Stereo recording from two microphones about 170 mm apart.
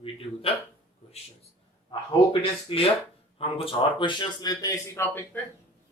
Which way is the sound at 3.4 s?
30° left (ahead or behind).